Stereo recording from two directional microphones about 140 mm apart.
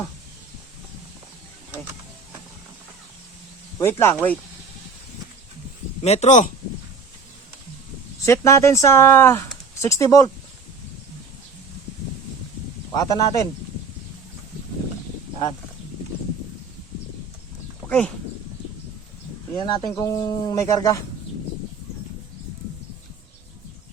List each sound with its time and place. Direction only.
3.8 s speech: 20° left (ahead or behind)
6.0 s speech: 50° left (ahead or behind)
8.2 s speech: 20° left (ahead or behind)
12.9 s speech: 25° left (ahead or behind)
17.8 s speech: 10° left (ahead or behind)
19.5 s speech: 30° left (ahead or behind)